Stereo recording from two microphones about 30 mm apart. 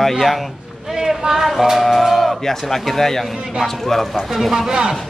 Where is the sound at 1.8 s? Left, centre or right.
Centre.